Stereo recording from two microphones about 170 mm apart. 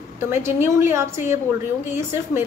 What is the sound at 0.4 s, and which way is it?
A woman's voice, 15° right (ahead or behind).